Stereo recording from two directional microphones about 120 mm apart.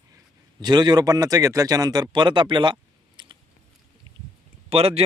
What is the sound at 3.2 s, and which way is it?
Biting, 40° right (ahead or behind).